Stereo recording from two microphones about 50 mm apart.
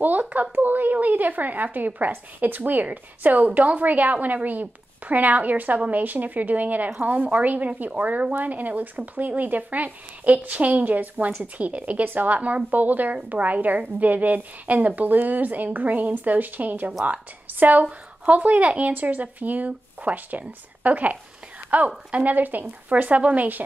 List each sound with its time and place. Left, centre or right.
0.0 s a woman's voice: right